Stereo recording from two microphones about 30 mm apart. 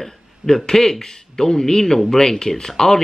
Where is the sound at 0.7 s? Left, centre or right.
Left.